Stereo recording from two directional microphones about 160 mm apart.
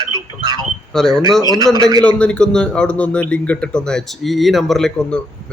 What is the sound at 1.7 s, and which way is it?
Speech, 25° right (ahead or behind).